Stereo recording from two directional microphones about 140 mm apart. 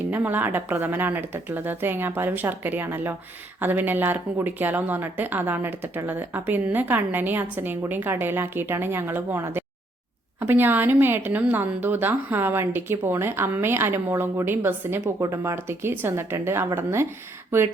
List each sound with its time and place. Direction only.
0.0 s speech: 15° right (ahead or behind)